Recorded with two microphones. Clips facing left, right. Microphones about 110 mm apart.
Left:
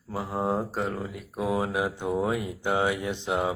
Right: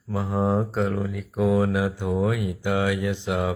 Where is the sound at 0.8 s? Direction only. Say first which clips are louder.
Right 5 dB; 55° right (ahead or behind).